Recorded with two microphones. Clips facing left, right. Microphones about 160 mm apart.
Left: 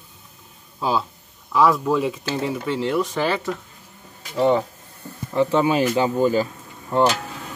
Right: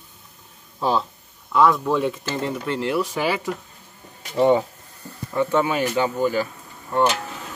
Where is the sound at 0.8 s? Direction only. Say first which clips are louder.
Right 1 dB; 10° left (ahead or behind); by 4.6 s 20° right (ahead or behind).